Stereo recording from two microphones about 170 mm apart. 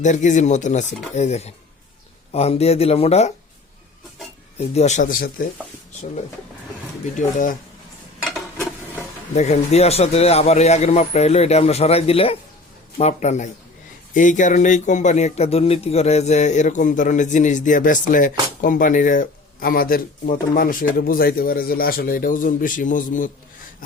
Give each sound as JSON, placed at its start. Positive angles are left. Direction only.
{"t": 0.0, "sound": "speech", "side_deg": 45}
{"t": 4.5, "sound": "speech", "side_deg": 40}
{"t": 8.5, "sound": "stir", "side_deg": -15}
{"t": 9.3, "sound": "speech", "side_deg": 40}